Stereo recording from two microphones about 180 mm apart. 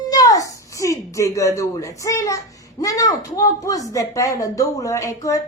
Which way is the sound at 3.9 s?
15° left (ahead or behind).